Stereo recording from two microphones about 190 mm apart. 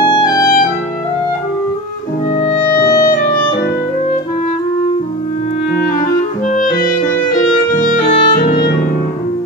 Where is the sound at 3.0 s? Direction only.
45° left (ahead or behind).